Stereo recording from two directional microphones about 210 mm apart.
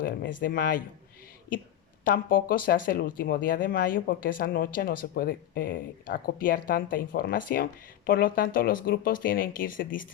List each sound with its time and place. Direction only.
0.0 s speech: 40° left (ahead or behind)
2.0 s speech: 40° left (ahead or behind)